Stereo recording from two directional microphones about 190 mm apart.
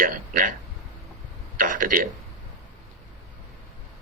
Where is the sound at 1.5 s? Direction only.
45° right (ahead or behind).